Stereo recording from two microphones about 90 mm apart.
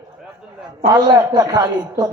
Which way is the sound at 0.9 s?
40° right (ahead or behind).